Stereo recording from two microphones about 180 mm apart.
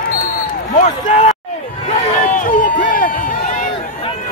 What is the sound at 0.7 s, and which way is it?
Speech, 40° left (ahead or behind).